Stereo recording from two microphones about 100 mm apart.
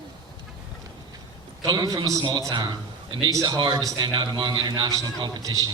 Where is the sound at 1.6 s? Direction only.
40° right (ahead or behind).